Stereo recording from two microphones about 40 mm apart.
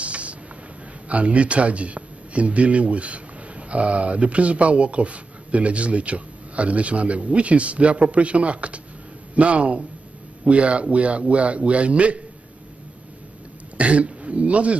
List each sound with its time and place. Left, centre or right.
0.0 s vehicle: right
1.0 s a man's voice: right
13.7 s throat clearing: right